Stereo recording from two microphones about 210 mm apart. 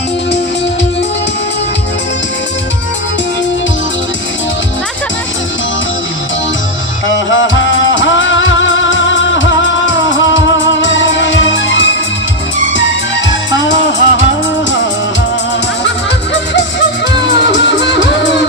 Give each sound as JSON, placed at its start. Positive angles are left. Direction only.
{"t": 7.1, "sound": "music", "side_deg": 60}
{"t": 13.5, "sound": "music", "side_deg": 60}
{"t": 17.2, "sound": "music", "side_deg": 60}